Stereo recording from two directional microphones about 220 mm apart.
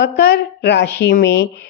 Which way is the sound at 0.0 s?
45° left (ahead or behind).